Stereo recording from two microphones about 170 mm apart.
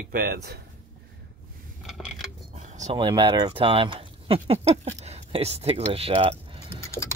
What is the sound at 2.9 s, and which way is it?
Speech, 25° right (ahead or behind).